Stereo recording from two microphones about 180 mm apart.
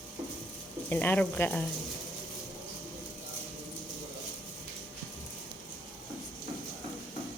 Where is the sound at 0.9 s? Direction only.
10° left (ahead or behind).